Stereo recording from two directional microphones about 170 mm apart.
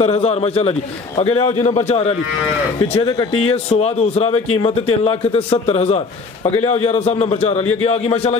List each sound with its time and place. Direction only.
0.0 s speech: 40° left (ahead or behind)
2.9 s speech: 25° left (ahead or behind)
3.3 s speech: 35° left (ahead or behind)